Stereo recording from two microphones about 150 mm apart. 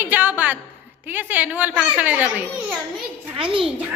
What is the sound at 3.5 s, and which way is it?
Speech, 35° right (ahead or behind).